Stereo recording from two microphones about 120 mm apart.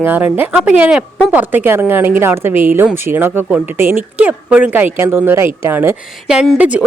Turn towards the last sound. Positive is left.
turn(degrees=-10)  # may be behind; listen again after turning